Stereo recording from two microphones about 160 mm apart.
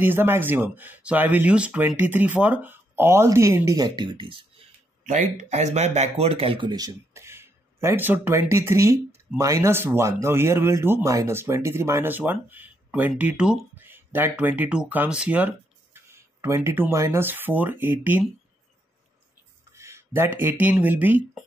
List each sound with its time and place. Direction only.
0.0 s speech: 15° right (ahead or behind); by 4.5 s 30° right (ahead or behind)
5.0 s speech: 50° right (ahead or behind); by 18.3 s 10° right (ahead or behind)
19.7 s a sound: 15° right (ahead or behind)
20.3 s speech: 10° right (ahead or behind)